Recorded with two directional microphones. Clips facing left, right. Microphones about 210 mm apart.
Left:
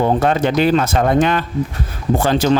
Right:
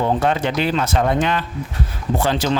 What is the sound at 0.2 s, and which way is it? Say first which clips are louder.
Speech: left 4 dB; 45° left (ahead or behind).